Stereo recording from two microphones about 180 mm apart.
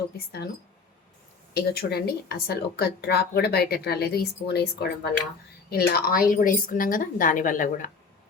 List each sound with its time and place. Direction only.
0.2 s speech: 60° left (ahead or behind)
1.5 s a woman's voice: 60° left (ahead or behind)